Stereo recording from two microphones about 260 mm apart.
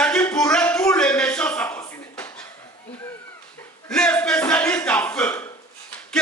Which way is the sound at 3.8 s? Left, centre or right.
Centre.